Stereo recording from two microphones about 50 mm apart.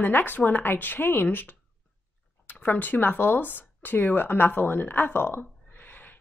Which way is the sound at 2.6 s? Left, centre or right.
Left.